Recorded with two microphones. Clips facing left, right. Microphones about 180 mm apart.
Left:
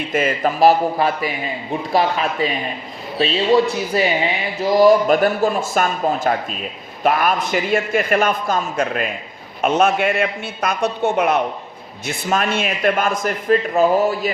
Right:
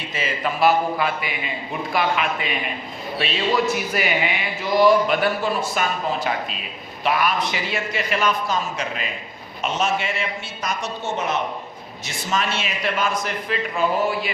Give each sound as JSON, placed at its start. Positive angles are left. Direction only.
{"t": 0.1, "sound": "speech", "side_deg": 55}
{"t": 0.6, "sound": "a man's voice", "side_deg": 35}